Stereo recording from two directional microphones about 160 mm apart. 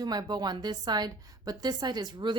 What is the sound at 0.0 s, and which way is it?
A woman's voice, 25° right (ahead or behind).